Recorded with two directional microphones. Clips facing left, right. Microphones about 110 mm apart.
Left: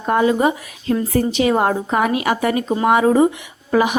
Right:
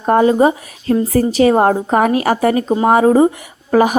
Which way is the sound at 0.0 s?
40° right (ahead or behind).